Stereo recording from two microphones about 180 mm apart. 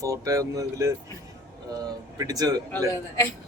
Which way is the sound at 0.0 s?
20° right (ahead or behind).